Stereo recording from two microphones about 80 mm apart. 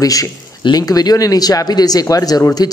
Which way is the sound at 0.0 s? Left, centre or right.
Left.